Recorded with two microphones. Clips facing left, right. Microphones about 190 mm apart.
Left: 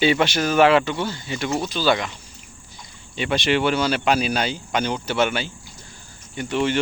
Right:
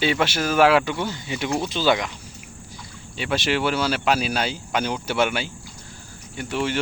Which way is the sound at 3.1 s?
5° right (ahead or behind).